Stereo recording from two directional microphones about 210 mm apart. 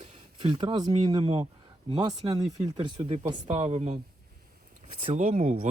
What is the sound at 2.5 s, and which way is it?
Speech, 30° right (ahead or behind).